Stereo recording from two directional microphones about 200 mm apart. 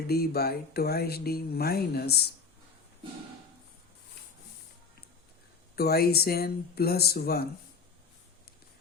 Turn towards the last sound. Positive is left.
turn(degrees=50)  # may be behind; listen again after turning